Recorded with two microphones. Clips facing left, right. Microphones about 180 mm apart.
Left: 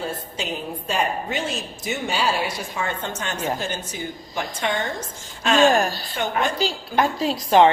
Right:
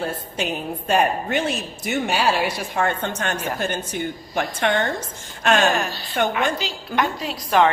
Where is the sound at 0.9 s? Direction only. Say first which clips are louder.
Right 5 dB; 55° right (ahead or behind).